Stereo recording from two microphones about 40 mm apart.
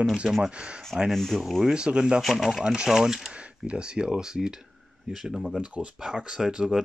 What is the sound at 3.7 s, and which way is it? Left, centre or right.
Speech, right.